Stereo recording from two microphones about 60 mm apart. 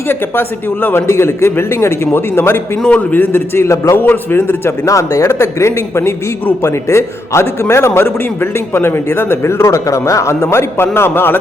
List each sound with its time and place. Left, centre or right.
0.1 s a man's voice: left
1.0 s a man's voice: left
2.8 s a man's voice: left
3.9 s a man's voice: left
4.9 s a man's voice: left